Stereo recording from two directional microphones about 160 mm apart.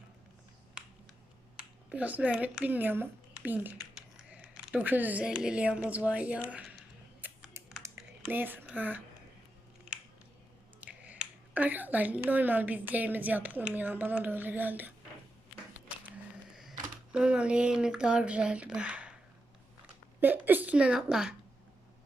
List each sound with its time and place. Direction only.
1.5 s speech: 5° right (ahead or behind)
7.2 s computer keyboard: 10° right (ahead or behind)
7.8 s typing: 20° right (ahead or behind)
8.3 s a woman's voice: 10° right (ahead or behind)
10.8 s speech: 10° right (ahead or behind)
16.6 s speech: 5° right (ahead or behind)
20.1 s a woman's voice: 10° right (ahead or behind)